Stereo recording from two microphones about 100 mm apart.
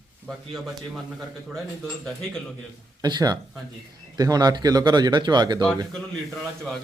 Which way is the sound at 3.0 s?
40° right (ahead or behind).